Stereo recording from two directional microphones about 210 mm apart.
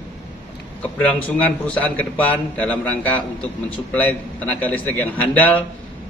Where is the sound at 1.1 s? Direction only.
10° left (ahead or behind).